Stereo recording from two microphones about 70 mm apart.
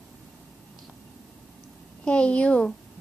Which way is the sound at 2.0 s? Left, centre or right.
Centre.